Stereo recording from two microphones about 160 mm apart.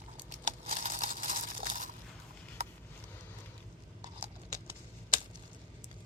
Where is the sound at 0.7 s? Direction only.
55° right (ahead or behind).